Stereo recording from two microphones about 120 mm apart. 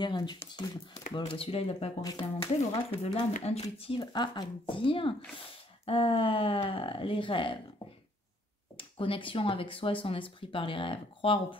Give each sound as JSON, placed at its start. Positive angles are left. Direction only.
{"t": 0.0, "sound": "speech", "side_deg": 40}
{"t": 2.1, "sound": "speech", "side_deg": 50}
{"t": 8.7, "sound": "speech", "side_deg": 50}